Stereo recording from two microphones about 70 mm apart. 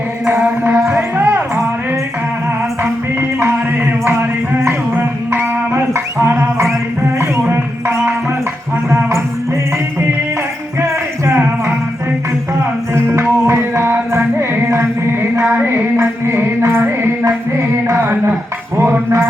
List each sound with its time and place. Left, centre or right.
0.9 s a sound: right
4.0 s music: right
8.9 s a sound: right
10.8 s music: right
13.0 s music: right
18.0 s dishes: right